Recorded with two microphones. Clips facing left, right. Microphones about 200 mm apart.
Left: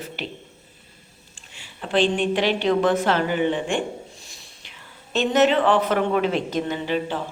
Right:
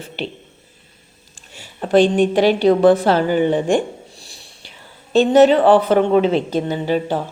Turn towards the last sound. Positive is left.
turn(degrees=-40)  # may be behind; listen again after turning